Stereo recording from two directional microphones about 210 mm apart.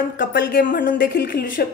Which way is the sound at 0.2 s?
45° left (ahead or behind).